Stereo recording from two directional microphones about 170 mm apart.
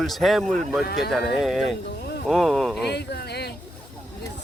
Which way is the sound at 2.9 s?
75° left (ahead or behind).